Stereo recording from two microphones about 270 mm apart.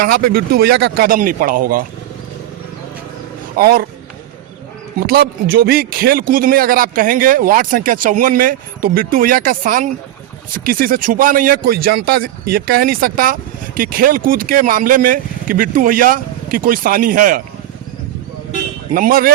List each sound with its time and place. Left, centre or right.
0.3 s speech: right
3.6 s speech: right
4.9 s speech: right
18.9 s speech: right